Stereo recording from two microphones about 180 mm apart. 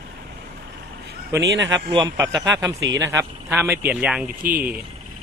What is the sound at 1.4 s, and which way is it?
Speech, 75° right (ahead or behind).